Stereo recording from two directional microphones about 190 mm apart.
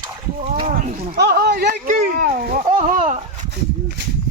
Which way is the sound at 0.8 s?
55° right (ahead or behind).